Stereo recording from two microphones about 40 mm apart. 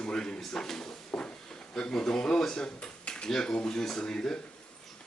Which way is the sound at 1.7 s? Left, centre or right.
Centre.